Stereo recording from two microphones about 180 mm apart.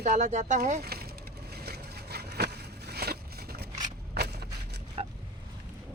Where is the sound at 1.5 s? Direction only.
60° right (ahead or behind).